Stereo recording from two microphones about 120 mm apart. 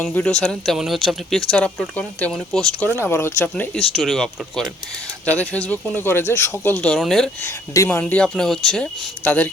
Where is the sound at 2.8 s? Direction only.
20° left (ahead or behind).